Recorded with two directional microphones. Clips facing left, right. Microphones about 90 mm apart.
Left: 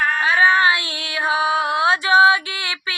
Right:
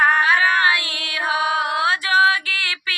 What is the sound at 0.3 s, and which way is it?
Child singing, 25° left (ahead or behind).